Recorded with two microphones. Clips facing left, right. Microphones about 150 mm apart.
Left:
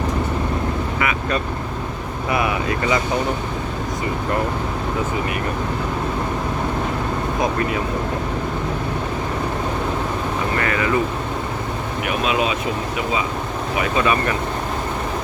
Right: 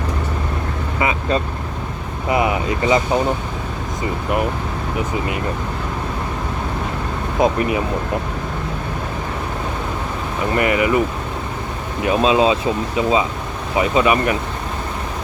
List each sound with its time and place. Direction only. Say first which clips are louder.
0.9 s vehicle: right 6 dB; 25° right (ahead or behind)
2.3 s speech: right 3 dB; 20° right (ahead or behind)
7.3 s speech: right 6 dB; 20° right (ahead or behind)
10.6 s speech: right 5 dB; 20° right (ahead or behind)
12.0 s speech: right 7 dB; 25° right (ahead or behind)
13.7 s speech: right 4 dB; 20° right (ahead or behind)